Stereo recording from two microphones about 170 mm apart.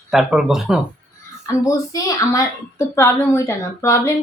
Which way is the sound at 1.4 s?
20° left (ahead or behind).